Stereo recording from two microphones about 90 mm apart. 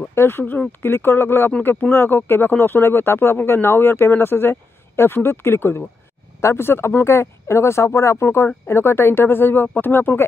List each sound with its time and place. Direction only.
0.1 s speech: 25° left (ahead or behind)